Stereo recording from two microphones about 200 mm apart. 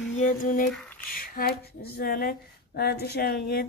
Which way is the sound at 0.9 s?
45° left (ahead or behind).